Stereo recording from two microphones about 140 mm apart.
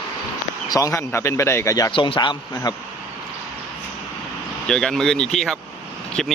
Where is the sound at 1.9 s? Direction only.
35° left (ahead or behind).